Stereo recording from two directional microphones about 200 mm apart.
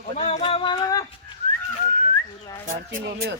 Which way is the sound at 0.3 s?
30° left (ahead or behind).